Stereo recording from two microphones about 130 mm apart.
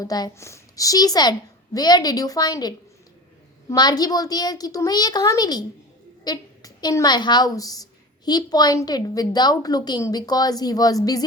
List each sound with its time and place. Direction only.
0.0 s a woman's voice: 30° left (ahead or behind)